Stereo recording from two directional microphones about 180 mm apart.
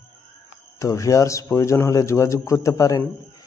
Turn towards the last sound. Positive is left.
turn(degrees=20)  # may be behind; listen again after turning